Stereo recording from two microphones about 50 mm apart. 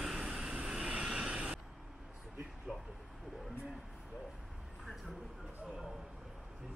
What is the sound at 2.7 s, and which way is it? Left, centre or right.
Vehicle, centre.